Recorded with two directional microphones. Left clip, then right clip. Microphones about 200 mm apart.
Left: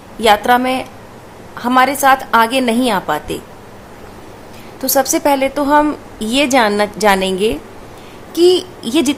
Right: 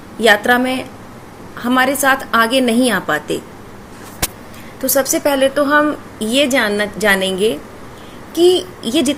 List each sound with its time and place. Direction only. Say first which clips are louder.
0.2 s a woman's voice: left 1 dB; 15° left (ahead or behind)
4.8 s a woman's voice: left 1 dB; 15° left (ahead or behind)